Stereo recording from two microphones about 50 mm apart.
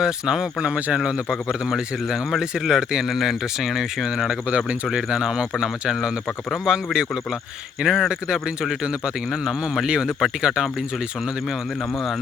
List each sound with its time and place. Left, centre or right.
0.0 s a man's voice: centre
1.3 s a man's voice: centre
4.4 s speech: right
4.9 s a man's voice: centre